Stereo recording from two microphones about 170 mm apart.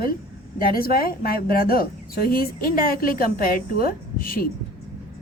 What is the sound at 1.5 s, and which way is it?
Speech, 60° left (ahead or behind).